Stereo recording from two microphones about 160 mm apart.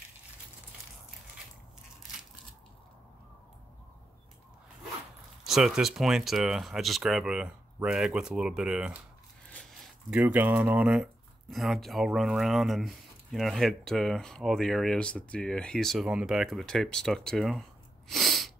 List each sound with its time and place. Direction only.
5.4 s speech: centre (ahead or behind)
10.1 s speech: 10° right (ahead or behind)